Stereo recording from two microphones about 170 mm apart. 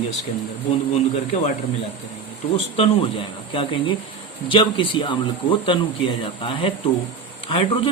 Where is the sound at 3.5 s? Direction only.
30° left (ahead or behind).